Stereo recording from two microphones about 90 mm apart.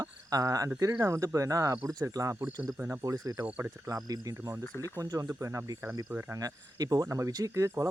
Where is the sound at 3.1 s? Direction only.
40° right (ahead or behind).